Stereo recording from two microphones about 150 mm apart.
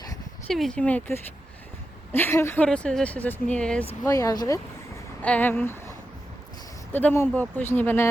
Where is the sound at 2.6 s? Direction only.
5° left (ahead or behind).